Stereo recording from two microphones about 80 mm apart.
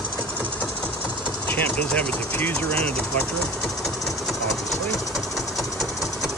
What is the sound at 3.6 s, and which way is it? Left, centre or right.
Train, centre.